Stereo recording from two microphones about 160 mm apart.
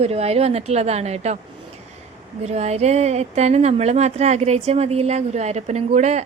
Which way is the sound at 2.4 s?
45° right (ahead or behind).